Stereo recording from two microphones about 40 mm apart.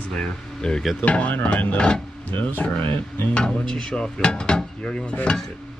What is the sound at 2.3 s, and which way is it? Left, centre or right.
Speech, left.